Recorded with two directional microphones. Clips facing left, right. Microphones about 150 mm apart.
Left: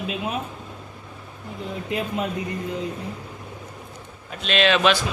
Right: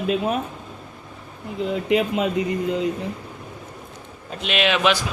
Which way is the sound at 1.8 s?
90° right.